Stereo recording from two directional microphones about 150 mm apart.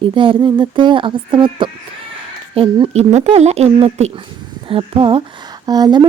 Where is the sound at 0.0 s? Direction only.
35° right (ahead or behind).